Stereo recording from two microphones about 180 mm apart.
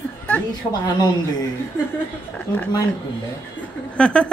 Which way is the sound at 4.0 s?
5° left (ahead or behind).